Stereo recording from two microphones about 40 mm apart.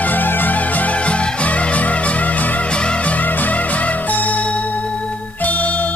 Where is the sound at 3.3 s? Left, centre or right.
Left.